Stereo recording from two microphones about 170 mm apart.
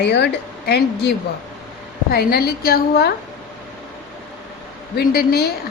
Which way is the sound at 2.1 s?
65° left (ahead or behind).